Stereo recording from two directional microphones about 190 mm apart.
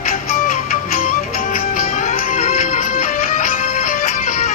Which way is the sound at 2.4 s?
35° left (ahead or behind).